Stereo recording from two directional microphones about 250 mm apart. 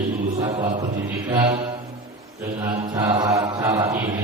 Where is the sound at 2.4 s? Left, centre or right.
Centre.